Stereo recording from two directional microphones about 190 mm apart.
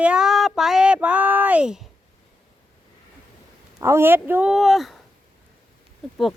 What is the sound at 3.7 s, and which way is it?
Speech, 15° right (ahead or behind).